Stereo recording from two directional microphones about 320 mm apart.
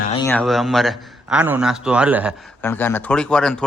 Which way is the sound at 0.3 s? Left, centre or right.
Centre.